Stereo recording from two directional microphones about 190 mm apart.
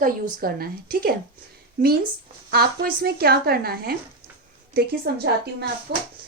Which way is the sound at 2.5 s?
55° right (ahead or behind).